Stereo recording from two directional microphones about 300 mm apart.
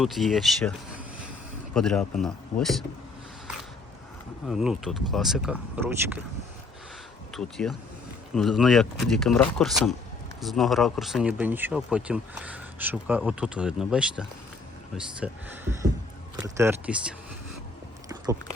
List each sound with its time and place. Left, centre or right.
0.0 s speech: centre
1.7 s speech: centre
4.4 s speech: centre
7.3 s speech: centre